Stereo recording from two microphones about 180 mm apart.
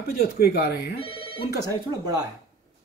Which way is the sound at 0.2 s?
60° left (ahead or behind).